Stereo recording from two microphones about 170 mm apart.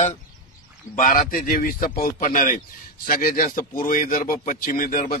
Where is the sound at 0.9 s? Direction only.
50° left (ahead or behind).